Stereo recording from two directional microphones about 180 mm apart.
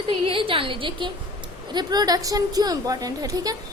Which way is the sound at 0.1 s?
30° right (ahead or behind).